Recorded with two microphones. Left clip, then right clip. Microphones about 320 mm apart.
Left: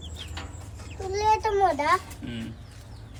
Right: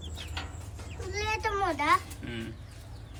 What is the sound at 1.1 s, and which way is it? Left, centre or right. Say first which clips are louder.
Speech: left 8 dB; centre.